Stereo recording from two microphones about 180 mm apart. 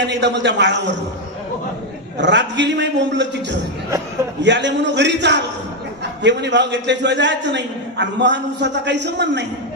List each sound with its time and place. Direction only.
0.0 s a man's voice: 75° right (ahead or behind)
2.1 s a man's voice: 75° right (ahead or behind)